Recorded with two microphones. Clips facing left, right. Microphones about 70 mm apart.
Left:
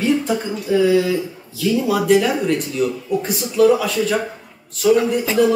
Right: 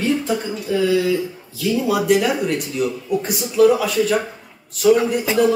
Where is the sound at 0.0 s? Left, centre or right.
Centre.